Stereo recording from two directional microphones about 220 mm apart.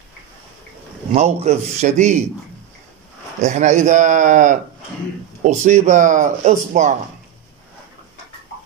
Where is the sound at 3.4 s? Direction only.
30° right (ahead or behind).